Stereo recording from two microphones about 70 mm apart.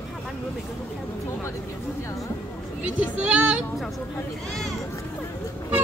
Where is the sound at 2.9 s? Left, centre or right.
Centre.